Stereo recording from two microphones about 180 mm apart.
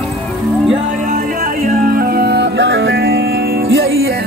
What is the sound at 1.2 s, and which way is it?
Music, 55° right (ahead or behind).